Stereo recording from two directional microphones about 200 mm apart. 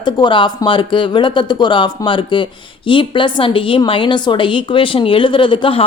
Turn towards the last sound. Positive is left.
turn(degrees=25)  # may be behind; listen again after turning